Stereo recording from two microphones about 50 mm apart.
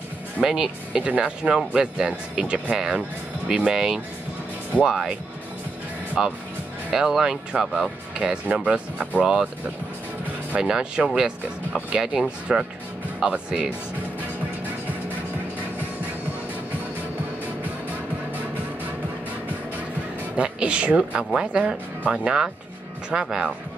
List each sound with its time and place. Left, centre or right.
0.4 s speech: centre
6.2 s speech: centre
9.2 s speech: centre
10.6 s speech: centre
11.9 s speech: centre
20.3 s speech: right